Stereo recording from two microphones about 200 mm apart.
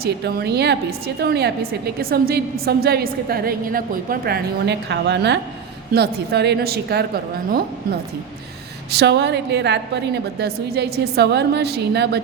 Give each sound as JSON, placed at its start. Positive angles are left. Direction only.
{"t": 0.0, "sound": "a woman's voice", "side_deg": -50}
{"t": 8.9, "sound": "a woman's voice", "side_deg": -55}